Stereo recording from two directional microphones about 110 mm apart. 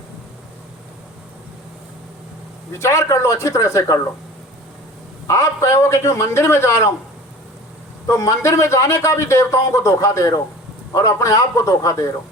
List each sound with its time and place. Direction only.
2.7 s speech: 25° left (ahead or behind)
5.3 s speech: 25° left (ahead or behind)
8.0 s speech: 30° left (ahead or behind)